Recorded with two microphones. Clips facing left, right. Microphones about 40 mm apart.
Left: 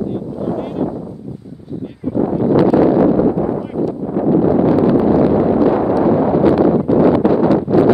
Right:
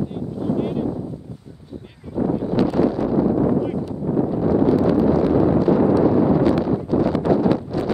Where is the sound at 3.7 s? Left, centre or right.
Left.